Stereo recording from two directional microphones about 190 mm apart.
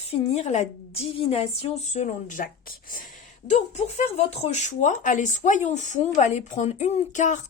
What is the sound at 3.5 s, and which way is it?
Speech, 35° left (ahead or behind).